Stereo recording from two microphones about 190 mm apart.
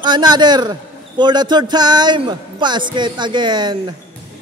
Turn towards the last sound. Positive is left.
turn(degrees=-25)  # may be behind; listen again after turning